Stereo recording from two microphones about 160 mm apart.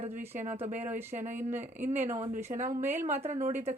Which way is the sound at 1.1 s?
55° right (ahead or behind).